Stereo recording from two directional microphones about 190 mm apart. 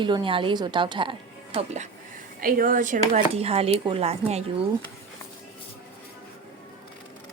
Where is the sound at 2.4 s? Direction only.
50° right (ahead or behind).